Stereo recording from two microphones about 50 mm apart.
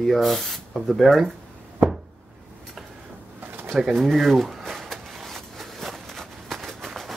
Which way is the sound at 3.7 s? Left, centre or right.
Centre.